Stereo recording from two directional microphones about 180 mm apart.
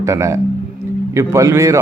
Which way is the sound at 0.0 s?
15° right (ahead or behind).